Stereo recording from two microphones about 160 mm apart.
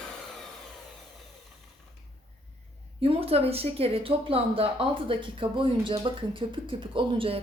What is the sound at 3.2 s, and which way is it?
Speech, 40° right (ahead or behind).